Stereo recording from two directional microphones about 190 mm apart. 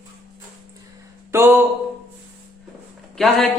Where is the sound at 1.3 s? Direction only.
15° right (ahead or behind).